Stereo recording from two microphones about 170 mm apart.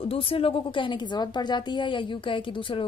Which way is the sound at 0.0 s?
35° left (ahead or behind).